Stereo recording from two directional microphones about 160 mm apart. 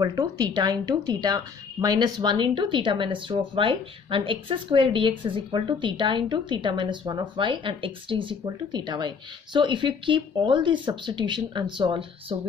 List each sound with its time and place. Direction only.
0.0 s speech: 25° right (ahead or behind)